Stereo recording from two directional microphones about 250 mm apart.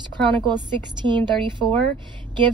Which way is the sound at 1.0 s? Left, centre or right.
Centre.